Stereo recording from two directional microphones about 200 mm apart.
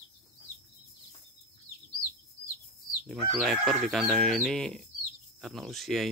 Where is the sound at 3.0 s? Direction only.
5° right (ahead or behind).